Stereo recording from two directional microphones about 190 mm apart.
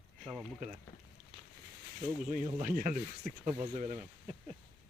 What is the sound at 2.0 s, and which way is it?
Speech, 40° right (ahead or behind).